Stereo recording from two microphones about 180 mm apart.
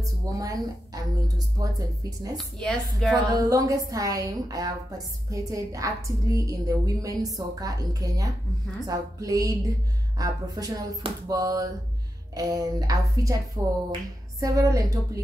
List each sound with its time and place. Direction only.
0.0 s a woman's voice: 20° right (ahead or behind)
2.3 s a woman's voice: 5° left (ahead or behind)
3.3 s a woman's voice: 20° right (ahead or behind)
14.4 s speech: 20° right (ahead or behind)